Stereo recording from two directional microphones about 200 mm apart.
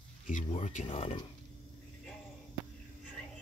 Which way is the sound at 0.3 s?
35° left (ahead or behind).